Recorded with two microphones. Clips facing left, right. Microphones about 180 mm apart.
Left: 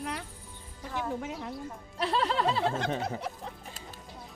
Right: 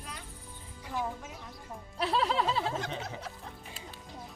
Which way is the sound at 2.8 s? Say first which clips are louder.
Left 6 dB; 55° left (ahead or behind).